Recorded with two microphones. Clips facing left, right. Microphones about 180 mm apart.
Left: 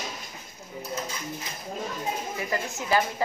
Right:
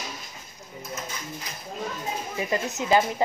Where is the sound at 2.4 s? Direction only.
20° right (ahead or behind).